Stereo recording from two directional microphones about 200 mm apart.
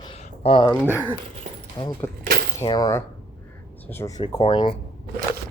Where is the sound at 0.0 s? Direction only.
30° left (ahead or behind).